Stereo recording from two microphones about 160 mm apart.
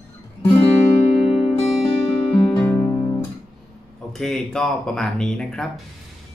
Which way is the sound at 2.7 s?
15° left (ahead or behind).